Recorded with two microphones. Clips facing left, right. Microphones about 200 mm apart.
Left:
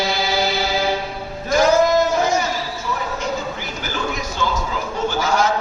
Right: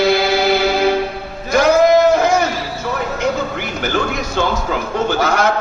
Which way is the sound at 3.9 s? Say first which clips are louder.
Right 5 dB; 65° right (ahead or behind).